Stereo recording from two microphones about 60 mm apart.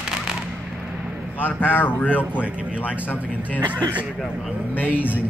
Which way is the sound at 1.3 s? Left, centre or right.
Left.